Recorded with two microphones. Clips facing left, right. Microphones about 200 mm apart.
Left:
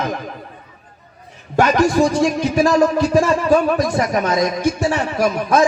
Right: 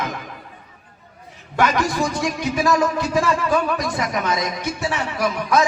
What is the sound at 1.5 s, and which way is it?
A man's voice, 45° left (ahead or behind).